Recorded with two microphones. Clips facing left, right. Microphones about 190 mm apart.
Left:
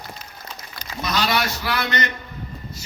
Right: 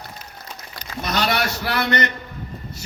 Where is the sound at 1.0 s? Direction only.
60° right (ahead or behind).